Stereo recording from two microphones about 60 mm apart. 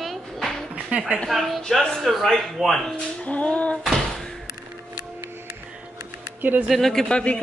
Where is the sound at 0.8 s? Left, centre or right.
Centre.